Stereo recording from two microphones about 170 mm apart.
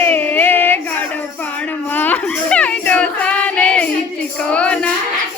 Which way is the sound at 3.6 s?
5° left (ahead or behind).